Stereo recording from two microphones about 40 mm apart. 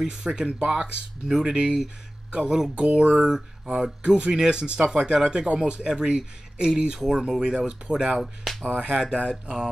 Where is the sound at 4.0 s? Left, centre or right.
Right.